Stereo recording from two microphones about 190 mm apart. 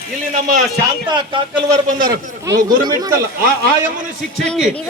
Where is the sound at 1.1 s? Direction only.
25° right (ahead or behind).